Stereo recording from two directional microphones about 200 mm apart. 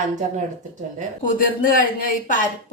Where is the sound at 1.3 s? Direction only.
45° left (ahead or behind).